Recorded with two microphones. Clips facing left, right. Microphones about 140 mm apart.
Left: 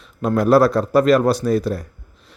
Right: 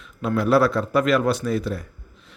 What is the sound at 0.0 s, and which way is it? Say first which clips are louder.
A man's voice: left 4 dB; 40° left (ahead or behind).